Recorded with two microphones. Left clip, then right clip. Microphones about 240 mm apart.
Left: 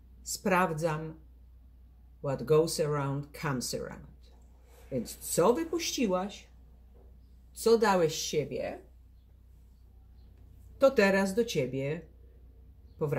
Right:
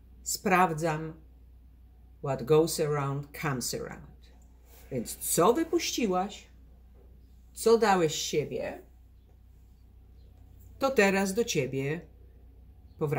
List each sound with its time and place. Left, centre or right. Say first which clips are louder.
0.4 s speech: right 3 dB; centre
2.2 s speech: right 2 dB; centre
5.0 s speech: right 2 dB; centre
7.5 s speech: right 2 dB; centre
8.5 s speech: right 1 dB; left
10.8 s speech: left 1 dB; centre